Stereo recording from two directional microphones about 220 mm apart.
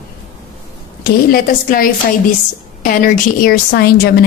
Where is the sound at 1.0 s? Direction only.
40° left (ahead or behind).